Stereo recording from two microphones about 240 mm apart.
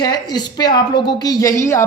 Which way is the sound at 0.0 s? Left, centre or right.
Centre.